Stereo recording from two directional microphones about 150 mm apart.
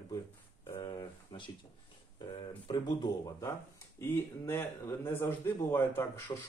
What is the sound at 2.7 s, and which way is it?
Speech, 25° left (ahead or behind).